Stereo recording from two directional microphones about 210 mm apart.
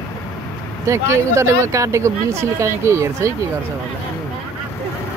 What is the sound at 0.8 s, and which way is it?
Speech, 15° right (ahead or behind).